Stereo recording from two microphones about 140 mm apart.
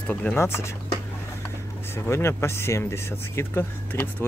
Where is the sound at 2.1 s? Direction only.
20° left (ahead or behind).